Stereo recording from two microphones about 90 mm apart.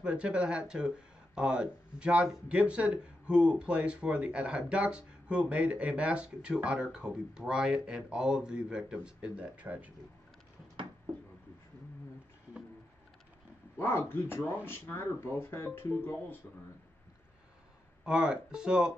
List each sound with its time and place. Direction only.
0.0 s speech: 10° right (ahead or behind)
13.7 s speech: 25° left (ahead or behind)
18.0 s speech: 10° right (ahead or behind)